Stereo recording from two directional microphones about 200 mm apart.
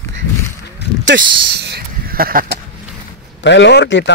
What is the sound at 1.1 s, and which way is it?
Speech, 55° right (ahead or behind).